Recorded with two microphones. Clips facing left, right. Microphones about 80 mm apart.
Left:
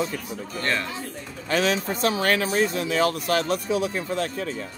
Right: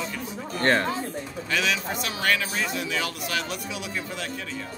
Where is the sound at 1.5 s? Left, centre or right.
Left.